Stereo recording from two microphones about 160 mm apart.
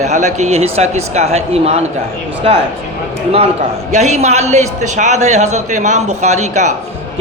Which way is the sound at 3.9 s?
45° right (ahead or behind).